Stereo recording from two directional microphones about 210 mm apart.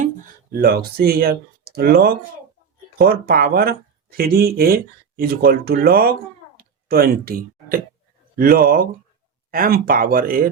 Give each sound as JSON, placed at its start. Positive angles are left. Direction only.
{"t": 0.5, "sound": "speech", "side_deg": -45}
{"t": 6.6, "sound": "a sound", "side_deg": -45}
{"t": 8.4, "sound": "speech", "side_deg": -45}